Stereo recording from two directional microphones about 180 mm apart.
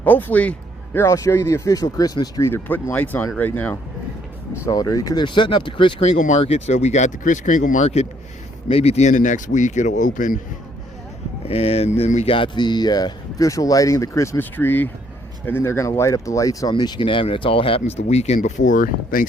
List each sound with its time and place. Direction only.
0.0 s speech: 10° left (ahead or behind); by 10.4 s 45° left (ahead or behind)
11.4 s speech: 35° left (ahead or behind); by 19.3 s 50° left (ahead or behind)